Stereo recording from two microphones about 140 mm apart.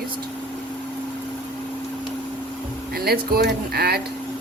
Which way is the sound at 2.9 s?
90° right.